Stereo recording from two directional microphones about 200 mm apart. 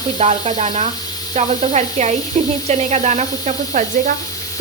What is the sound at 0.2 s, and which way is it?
Sizzle, 35° right (ahead or behind).